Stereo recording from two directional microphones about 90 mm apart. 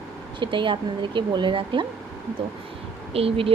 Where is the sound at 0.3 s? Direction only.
65° right (ahead or behind).